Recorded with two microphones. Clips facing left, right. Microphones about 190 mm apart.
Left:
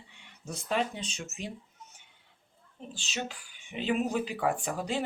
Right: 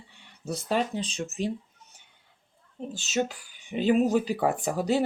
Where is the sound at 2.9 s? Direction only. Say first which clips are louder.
Right 9 dB; 45° right (ahead or behind).